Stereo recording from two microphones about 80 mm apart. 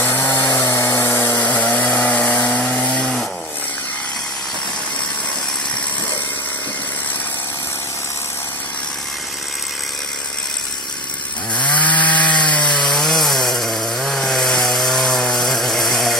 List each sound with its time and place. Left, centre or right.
0.0 s chainsaw: left
0.7 s tools: left
1.4 s chainsaw: centre
11.5 s wood: centre